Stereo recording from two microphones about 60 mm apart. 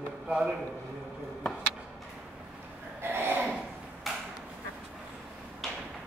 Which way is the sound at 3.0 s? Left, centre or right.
Right.